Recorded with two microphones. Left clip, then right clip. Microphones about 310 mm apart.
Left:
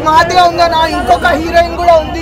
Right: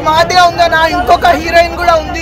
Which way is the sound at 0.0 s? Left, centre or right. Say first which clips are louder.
Even; centre.